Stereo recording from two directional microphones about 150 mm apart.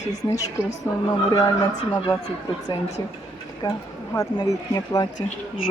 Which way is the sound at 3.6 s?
25° left (ahead or behind).